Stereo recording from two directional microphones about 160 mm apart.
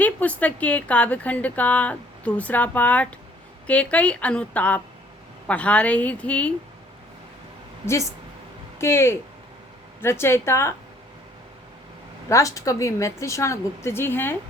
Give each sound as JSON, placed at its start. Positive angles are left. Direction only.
{"t": 0.0, "sound": "speech", "side_deg": 10}
{"t": 8.8, "sound": "speech", "side_deg": 15}
{"t": 12.3, "sound": "speech", "side_deg": 20}